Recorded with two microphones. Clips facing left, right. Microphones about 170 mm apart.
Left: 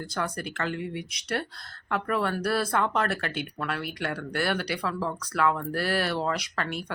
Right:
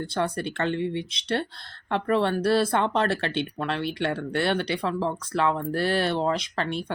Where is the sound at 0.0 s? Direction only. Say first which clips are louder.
Right 5 dB; 25° right (ahead or behind).